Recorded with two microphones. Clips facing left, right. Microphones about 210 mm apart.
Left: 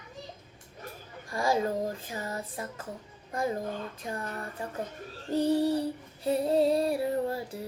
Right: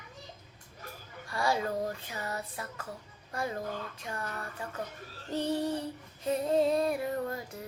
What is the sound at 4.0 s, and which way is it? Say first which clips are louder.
Child singing: left 3 dB; 35° left (ahead or behind).